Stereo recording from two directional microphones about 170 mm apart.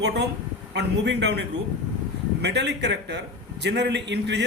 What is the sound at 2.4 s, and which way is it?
A man's voice, 85° right.